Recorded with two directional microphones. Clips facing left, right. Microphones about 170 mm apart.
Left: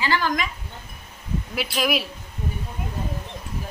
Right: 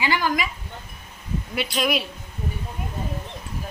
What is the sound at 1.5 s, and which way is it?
Speech, centre (ahead or behind).